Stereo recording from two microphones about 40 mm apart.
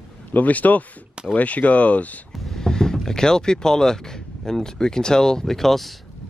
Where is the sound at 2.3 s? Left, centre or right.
Centre.